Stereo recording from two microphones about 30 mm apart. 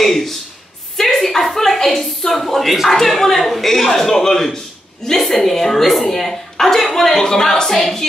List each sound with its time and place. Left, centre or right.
0.0 s a sound: centre
0.9 s a woman's voice: centre
7.2 s a woman's voice: left